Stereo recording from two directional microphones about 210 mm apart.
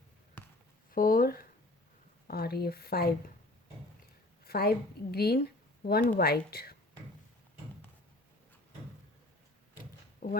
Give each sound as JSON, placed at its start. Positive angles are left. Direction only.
{"t": 0.4, "sound": "basketball bounce", "side_deg": 10}
{"t": 0.9, "sound": "speech", "side_deg": 45}
{"t": 4.4, "sound": "speech", "side_deg": 50}
{"t": 10.2, "sound": "speech", "side_deg": 40}